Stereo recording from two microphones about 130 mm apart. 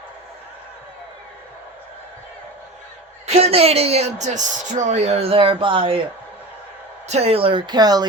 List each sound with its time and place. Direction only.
3.2 s speech: 55° right (ahead or behind)
7.1 s speech: 55° right (ahead or behind); by 8.0 s 30° right (ahead or behind)